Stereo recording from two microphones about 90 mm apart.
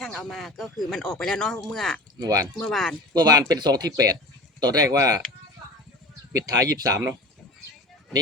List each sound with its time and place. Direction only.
0.0 s speech: 5° left (ahead or behind)
2.2 s speech: 35° right (ahead or behind)
2.6 s speech: 5° left (ahead or behind)
3.1 s speech: 50° right (ahead or behind)
6.3 s speech: 45° right (ahead or behind)